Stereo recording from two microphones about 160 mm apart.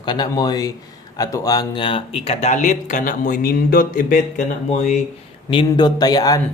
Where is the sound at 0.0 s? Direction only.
30° left (ahead or behind); by 4.9 s 50° left (ahead or behind).